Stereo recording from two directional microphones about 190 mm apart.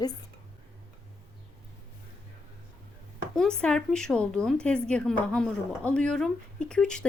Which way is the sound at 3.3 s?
5° left (ahead or behind).